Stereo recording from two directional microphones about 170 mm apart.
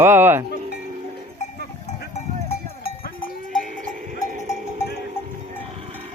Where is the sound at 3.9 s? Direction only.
50° right (ahead or behind).